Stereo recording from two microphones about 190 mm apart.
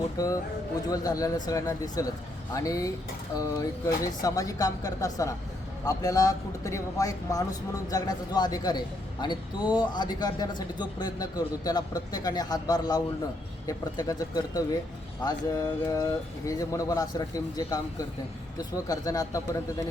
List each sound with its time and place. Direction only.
0.2 s speech: 20° left (ahead or behind)